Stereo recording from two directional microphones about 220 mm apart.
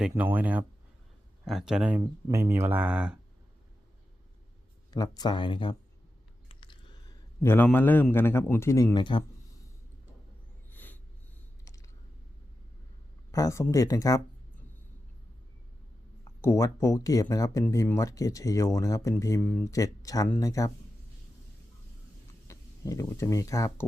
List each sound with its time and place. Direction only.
0.0 s speech: 5° right (ahead or behind)
4.9 s speech: 20° left (ahead or behind)
6.5 s a sound: 25° left (ahead or behind)
7.4 s speech: 10° left (ahead or behind)
10.7 s snort: 10° left (ahead or behind)
13.3 s speech: 15° left (ahead or behind)
16.4 s speech: 15° left (ahead or behind)
22.4 s speech: 15° left (ahead or behind)